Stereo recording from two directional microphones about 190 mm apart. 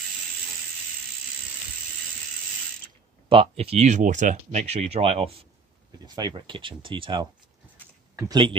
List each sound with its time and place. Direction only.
3.3 s speech: 30° right (ahead or behind)